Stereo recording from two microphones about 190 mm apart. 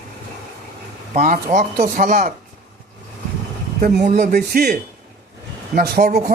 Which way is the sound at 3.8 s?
45° right (ahead or behind).